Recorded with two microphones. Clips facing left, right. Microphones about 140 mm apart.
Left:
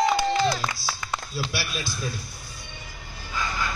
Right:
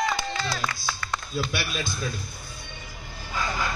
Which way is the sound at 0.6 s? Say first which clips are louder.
Even; 10° left (ahead or behind).